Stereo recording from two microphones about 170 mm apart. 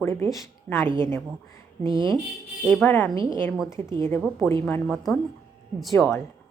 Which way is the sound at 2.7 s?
10° left (ahead or behind).